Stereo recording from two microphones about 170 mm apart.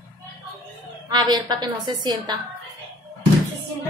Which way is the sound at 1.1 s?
25° right (ahead or behind).